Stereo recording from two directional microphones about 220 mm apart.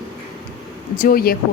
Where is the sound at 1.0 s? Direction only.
40° left (ahead or behind).